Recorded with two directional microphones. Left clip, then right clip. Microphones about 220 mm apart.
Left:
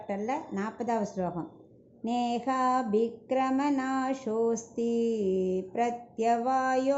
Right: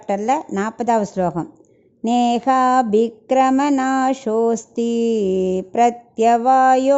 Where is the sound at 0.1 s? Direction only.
50° right (ahead or behind).